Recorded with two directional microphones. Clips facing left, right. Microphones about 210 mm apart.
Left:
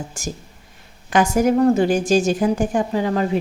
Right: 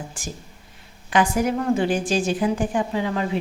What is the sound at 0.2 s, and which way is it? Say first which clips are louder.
A woman's voice: left 5 dB; 45° left (ahead or behind).